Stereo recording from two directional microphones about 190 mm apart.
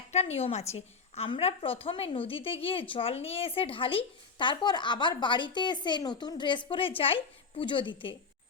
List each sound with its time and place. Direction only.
0.1 s a woman's voice: 35° left (ahead or behind)